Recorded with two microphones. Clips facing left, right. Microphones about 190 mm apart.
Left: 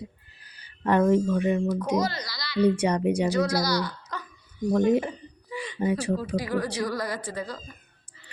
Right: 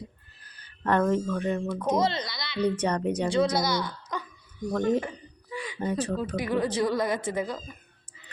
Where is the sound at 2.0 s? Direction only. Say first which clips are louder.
Right 1 dB; 25° right (ahead or behind).